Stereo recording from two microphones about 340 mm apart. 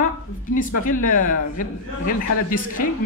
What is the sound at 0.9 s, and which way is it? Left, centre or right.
A woman's voice, left.